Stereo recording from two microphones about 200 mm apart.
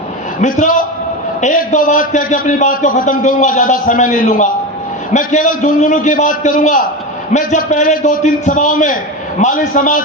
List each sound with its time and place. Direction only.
0.4 s a man's voice: 40° left (ahead or behind)